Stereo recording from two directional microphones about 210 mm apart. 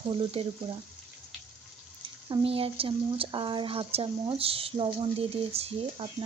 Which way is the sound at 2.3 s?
25° right (ahead or behind).